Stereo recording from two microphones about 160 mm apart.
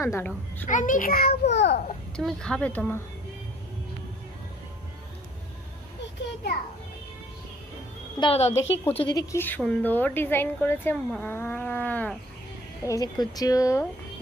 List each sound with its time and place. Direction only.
0.0 s speech: 15° left (ahead or behind)
0.7 s a child's voice: 55° left (ahead or behind); by 1.8 s 90° left
2.1 s speech: 5° left (ahead or behind)
8.2 s a woman's voice: 40° left (ahead or behind)
8.5 s speech: 15° left (ahead or behind)
9.0 s speech: 25° left (ahead or behind)
12.8 s speech: 20° left (ahead or behind)